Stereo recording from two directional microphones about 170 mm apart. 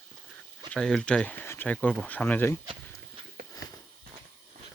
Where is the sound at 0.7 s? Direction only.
5° left (ahead or behind).